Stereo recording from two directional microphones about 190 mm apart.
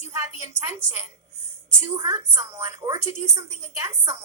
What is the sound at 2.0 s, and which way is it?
A woman's voice, 15° right (ahead or behind).